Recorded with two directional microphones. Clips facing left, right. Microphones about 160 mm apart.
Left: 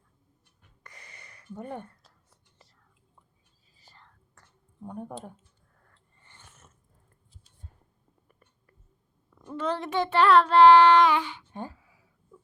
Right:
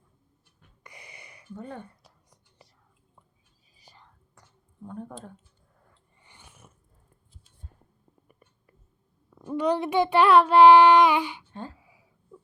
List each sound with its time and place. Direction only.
0.9 s a sound: 10° right (ahead or behind)
1.5 s speech: 15° left (ahead or behind)
1.8 s whispering: 15° right (ahead or behind)
3.8 s whispering: 15° right (ahead or behind)
4.8 s speech: 15° left (ahead or behind)
5.8 s a sound: 10° right (ahead or behind)
8.3 s whispering: 10° right (ahead or behind)
9.5 s child singing: 15° right (ahead or behind)
11.8 s a sound: 15° right (ahead or behind)